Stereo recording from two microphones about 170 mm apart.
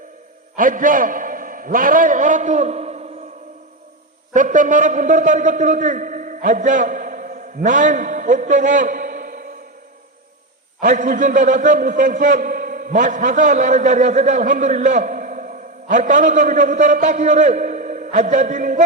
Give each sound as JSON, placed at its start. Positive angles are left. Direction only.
{"t": 0.5, "sound": "a man's voice", "side_deg": -50}
{"t": 4.4, "sound": "a man's voice", "side_deg": -50}
{"t": 10.8, "sound": "a man's voice", "side_deg": -50}